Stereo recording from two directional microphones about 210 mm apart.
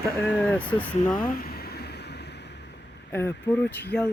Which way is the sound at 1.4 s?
50° left (ahead or behind).